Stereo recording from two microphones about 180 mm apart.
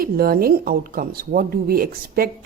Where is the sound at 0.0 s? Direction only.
55° right (ahead or behind).